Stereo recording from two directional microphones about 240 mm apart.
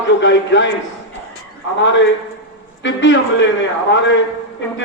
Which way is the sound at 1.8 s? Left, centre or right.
Left.